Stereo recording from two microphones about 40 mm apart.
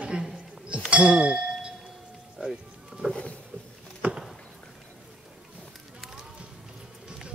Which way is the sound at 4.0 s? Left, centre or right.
Right.